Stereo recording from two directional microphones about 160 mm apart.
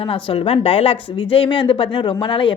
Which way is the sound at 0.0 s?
35° left (ahead or behind).